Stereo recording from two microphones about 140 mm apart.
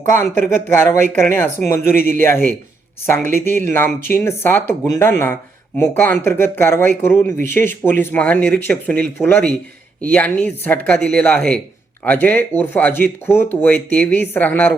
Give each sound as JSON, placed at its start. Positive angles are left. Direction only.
{"t": 0.2, "sound": "speech", "side_deg": 15}